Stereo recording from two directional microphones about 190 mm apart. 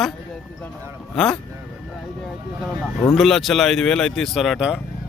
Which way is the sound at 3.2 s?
Centre (ahead or behind).